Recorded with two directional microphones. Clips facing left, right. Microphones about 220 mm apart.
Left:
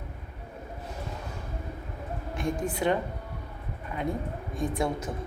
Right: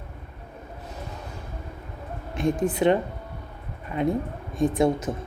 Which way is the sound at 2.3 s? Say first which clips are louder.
Right 7 dB; 20° right (ahead or behind).